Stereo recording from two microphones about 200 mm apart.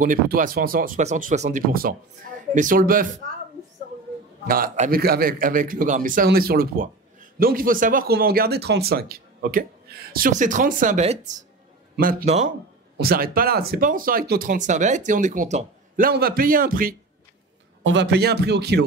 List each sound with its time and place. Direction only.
0.0 s speech: 40° right (ahead or behind)
4.5 s speech: 45° right (ahead or behind)
12.0 s speech: 45° right (ahead or behind)
17.8 s speech: 60° right (ahead or behind)